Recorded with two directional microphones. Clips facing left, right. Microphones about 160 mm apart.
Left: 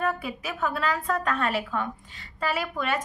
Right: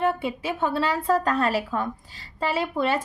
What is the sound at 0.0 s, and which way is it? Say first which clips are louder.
A woman's voice: right 4 dB; 25° right (ahead or behind).